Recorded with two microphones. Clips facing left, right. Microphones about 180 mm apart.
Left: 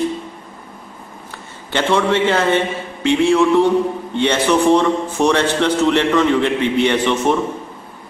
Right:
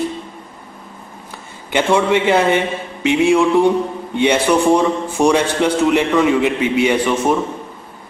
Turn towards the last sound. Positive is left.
turn(degrees=-10)  # may be behind; listen again after turning